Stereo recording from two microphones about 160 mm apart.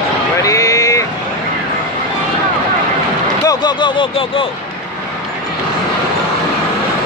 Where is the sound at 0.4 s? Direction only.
20° left (ahead or behind).